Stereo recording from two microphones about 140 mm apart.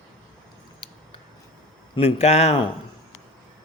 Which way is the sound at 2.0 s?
45° left (ahead or behind).